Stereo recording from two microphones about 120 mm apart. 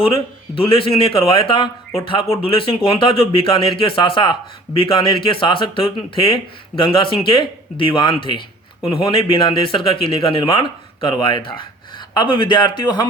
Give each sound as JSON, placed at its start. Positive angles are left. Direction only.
{"t": 0.0, "sound": "speech", "side_deg": 50}